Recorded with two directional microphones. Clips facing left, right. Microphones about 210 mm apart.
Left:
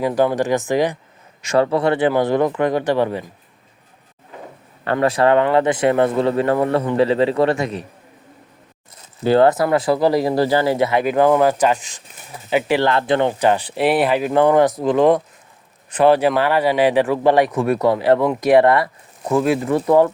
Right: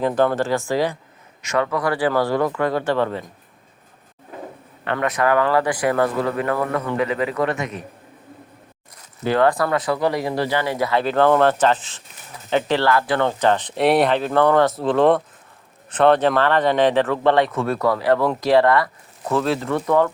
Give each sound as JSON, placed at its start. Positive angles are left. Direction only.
{"t": 0.0, "sound": "speech", "side_deg": 10}
{"t": 1.4, "sound": "speech", "side_deg": 30}
{"t": 4.9, "sound": "a man's voice", "side_deg": 30}
{"t": 9.2, "sound": "speech", "side_deg": 30}
{"t": 12.9, "sound": "speech", "side_deg": 25}
{"t": 14.9, "sound": "speech", "side_deg": 0}
{"t": 19.7, "sound": "speech", "side_deg": 30}